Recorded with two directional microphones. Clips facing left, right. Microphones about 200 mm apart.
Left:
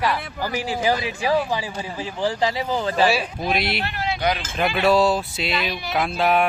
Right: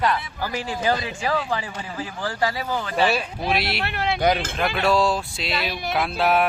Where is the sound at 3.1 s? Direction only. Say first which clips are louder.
Left 1 dB; centre (ahead or behind).